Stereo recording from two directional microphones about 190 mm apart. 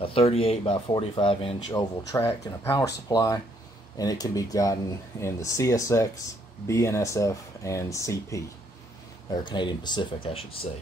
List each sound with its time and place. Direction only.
0.0 s speech: 30° left (ahead or behind)
1.8 s speech: 10° left (ahead or behind); by 10.7 s 30° left (ahead or behind)